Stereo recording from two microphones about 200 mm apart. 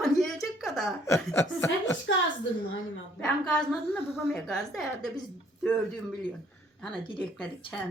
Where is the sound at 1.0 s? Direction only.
15° left (ahead or behind).